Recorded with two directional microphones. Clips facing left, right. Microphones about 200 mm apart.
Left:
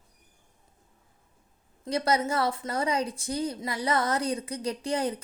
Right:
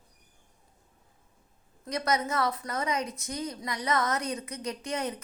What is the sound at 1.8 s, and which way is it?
A woman's voice, 30° left (ahead or behind).